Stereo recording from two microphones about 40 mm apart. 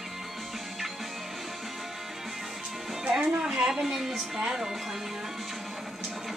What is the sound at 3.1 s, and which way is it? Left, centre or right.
Music, right.